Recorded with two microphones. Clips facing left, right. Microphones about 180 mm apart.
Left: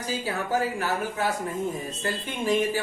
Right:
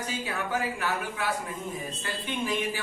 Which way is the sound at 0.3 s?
40° left (ahead or behind).